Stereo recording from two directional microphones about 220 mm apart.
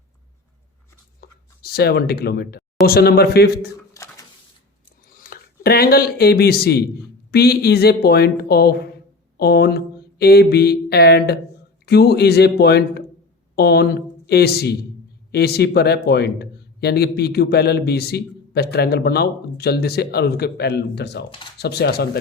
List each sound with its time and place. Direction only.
1.2 s writing: 40° left (ahead or behind)
1.6 s a man's voice: 45° left (ahead or behind)
3.9 s a sound: 15° left (ahead or behind)
5.1 s a man's voice: 40° left (ahead or behind)